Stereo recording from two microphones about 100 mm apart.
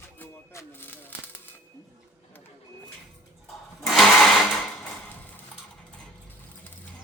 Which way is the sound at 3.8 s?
Centre (ahead or behind).